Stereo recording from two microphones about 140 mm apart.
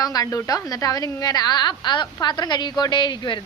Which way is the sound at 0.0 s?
25° left (ahead or behind).